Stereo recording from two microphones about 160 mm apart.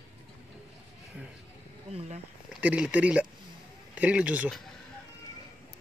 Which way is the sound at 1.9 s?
40° right (ahead or behind).